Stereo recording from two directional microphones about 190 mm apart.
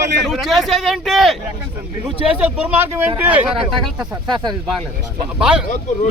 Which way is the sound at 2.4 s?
10° right (ahead or behind).